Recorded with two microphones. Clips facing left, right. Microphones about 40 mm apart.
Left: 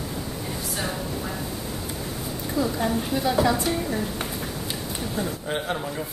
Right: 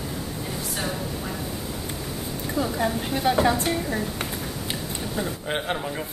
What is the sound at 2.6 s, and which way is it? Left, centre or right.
Speech, right.